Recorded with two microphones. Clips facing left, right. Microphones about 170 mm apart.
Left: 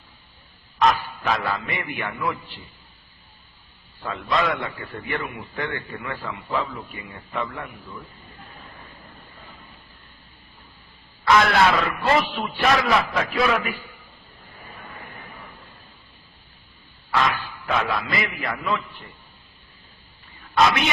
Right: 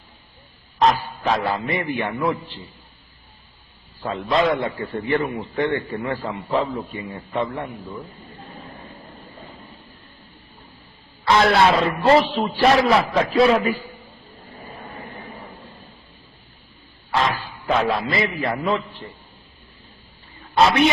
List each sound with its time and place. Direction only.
1.3 s a man's voice: 30° right (ahead or behind)
4.0 s a man's voice: 30° right (ahead or behind)
11.3 s a man's voice: 30° right (ahead or behind)
17.1 s a man's voice: 30° right (ahead or behind)